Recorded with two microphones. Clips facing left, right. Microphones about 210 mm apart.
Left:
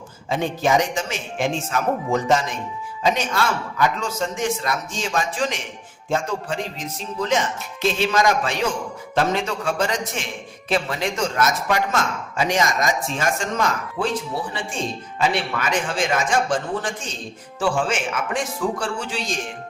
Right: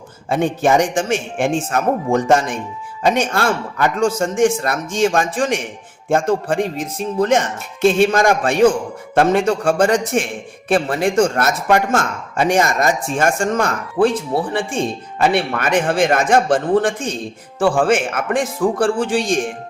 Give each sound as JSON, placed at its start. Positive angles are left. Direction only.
{"t": 0.3, "sound": "a man's voice", "side_deg": -55}